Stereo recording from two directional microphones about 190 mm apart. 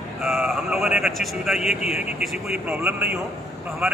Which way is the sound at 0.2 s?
5° right (ahead or behind).